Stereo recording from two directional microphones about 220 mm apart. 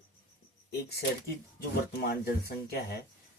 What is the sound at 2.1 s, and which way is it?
Speech, 45° left (ahead or behind).